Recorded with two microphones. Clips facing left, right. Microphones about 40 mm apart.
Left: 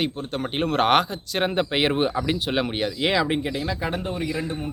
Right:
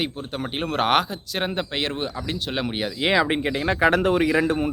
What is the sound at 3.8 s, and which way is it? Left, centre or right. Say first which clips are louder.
Speech: right 9 dB; right.